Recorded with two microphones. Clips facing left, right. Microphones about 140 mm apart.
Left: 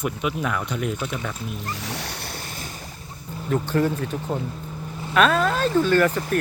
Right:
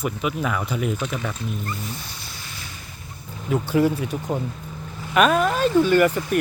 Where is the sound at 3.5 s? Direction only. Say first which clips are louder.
Right 2 dB; 10° right (ahead or behind).